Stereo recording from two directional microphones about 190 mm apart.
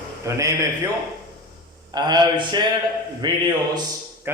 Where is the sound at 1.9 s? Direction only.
20° right (ahead or behind).